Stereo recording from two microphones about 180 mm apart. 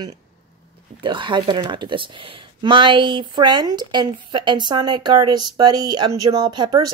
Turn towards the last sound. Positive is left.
turn(degrees=-20)  # may be behind; listen again after turning